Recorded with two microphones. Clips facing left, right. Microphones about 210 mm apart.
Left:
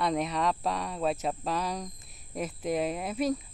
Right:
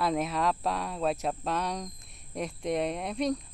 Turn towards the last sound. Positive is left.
turn(degrees=5)  # may be behind; listen again after turning